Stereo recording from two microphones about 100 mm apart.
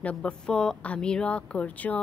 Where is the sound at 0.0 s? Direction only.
10° left (ahead or behind).